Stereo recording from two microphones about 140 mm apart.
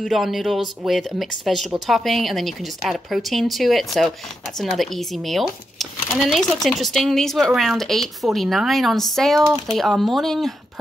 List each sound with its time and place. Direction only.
0.0 s speech: centre (ahead or behind)